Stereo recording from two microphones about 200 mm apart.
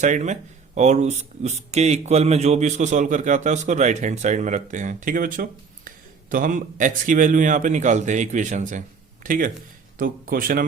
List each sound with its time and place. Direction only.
0.0 s speech: 35° right (ahead or behind)